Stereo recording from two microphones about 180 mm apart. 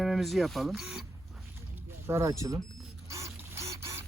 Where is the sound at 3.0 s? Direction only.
15° right (ahead or behind).